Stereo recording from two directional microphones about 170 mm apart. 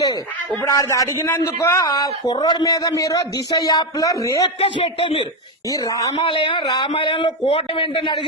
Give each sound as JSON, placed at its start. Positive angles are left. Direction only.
{"t": 0.7, "sound": "a man's voice", "side_deg": 20}
{"t": 4.6, "sound": "a man's voice", "side_deg": 35}
{"t": 5.6, "sound": "a man's voice", "side_deg": 20}
{"t": 6.1, "sound": "a man's voice", "side_deg": 30}